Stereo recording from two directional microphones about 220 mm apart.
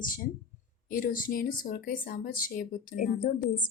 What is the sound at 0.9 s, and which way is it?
Speech, 40° left (ahead or behind).